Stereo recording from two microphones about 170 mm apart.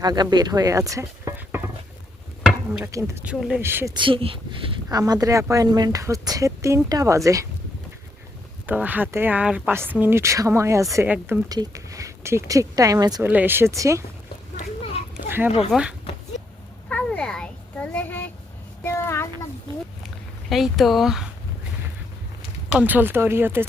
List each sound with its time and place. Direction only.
0.0 s speech: 25° right (ahead or behind)
2.9 s speech: 15° right (ahead or behind)
3.9 s speech: 30° right (ahead or behind)
8.6 s speech: 10° right (ahead or behind)
13.2 s speech: 10° right (ahead or behind)
15.1 s children playing: 10° right (ahead or behind)
15.7 s speech: 5° right (ahead or behind)
16.9 s a sound: 5° left (ahead or behind)
20.5 s speech: centre (ahead or behind)
22.7 s speech: 10° right (ahead or behind)